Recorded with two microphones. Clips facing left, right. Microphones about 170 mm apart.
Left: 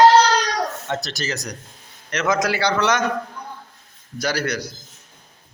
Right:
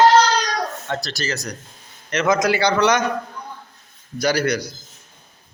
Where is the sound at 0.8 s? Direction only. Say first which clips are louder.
Even; 20° left (ahead or behind).